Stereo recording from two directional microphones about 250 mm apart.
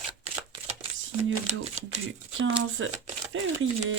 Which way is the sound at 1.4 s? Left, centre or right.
Right.